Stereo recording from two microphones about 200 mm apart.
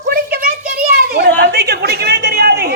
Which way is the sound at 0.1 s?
50° right (ahead or behind).